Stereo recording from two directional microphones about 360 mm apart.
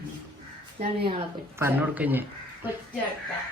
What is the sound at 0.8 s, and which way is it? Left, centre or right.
Speech, centre.